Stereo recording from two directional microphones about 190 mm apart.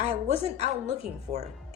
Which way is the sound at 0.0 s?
35° right (ahead or behind).